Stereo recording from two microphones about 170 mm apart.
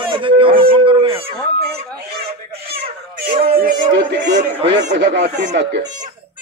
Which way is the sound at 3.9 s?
90° right.